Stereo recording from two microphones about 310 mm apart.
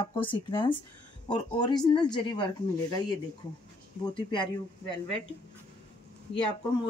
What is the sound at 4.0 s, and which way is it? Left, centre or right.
Speech, centre.